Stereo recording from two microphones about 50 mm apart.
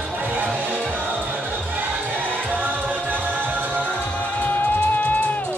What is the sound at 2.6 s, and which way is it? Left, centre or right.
Music, right.